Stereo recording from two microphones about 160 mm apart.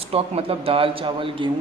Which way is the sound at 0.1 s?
35° right (ahead or behind).